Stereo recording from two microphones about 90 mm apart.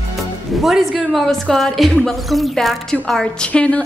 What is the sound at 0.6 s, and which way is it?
A woman's voice, centre (ahead or behind).